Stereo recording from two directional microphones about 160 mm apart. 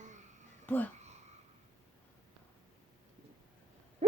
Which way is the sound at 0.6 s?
10° left (ahead or behind).